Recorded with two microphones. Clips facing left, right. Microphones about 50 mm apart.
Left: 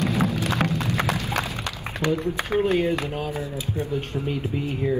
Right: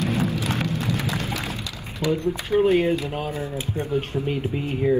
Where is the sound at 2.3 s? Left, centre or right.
Left.